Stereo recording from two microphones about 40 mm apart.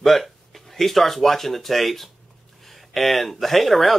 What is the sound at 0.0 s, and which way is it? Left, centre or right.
Speech, centre.